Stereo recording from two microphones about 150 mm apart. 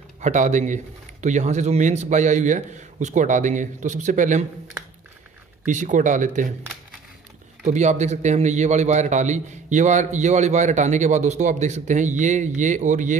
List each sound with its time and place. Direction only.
0.2 s a man's voice: 55° right (ahead or behind)
5.7 s speech: 55° right (ahead or behind)
7.6 s a man's voice: 50° right (ahead or behind)